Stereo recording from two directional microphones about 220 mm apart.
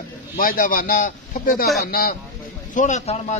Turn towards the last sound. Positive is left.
turn(degrees=30)  # may be behind; listen again after turning